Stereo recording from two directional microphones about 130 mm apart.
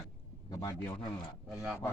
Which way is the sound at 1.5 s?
5° right (ahead or behind).